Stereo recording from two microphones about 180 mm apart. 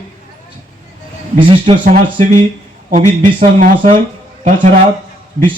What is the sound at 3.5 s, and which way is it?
Speech, 45° right (ahead or behind).